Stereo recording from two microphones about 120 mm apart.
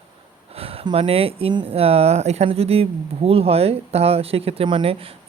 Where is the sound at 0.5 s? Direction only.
55° right (ahead or behind).